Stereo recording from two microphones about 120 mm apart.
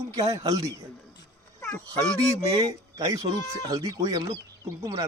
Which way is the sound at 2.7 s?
25° right (ahead or behind).